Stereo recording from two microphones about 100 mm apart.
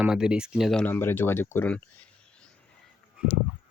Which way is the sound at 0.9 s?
20° left (ahead or behind).